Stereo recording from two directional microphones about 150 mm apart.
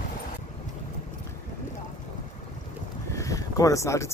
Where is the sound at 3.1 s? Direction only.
20° left (ahead or behind).